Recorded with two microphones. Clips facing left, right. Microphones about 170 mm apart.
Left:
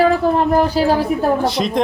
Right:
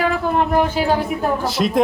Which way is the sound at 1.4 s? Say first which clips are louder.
Left 1 dB; centre (ahead or behind).